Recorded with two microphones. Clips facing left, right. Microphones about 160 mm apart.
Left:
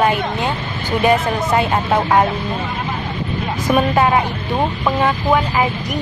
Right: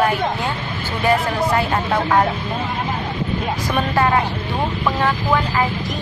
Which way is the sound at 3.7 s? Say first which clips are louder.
Left 3 dB; 15° left (ahead or behind).